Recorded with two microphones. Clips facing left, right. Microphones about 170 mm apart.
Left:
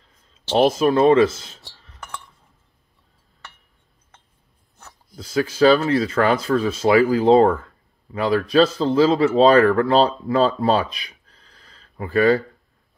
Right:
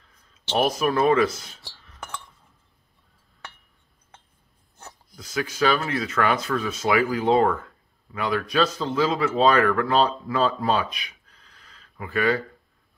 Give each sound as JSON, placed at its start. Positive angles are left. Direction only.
{"t": 0.5, "sound": "speech", "side_deg": 25}
{"t": 5.1, "sound": "a man's voice", "side_deg": 30}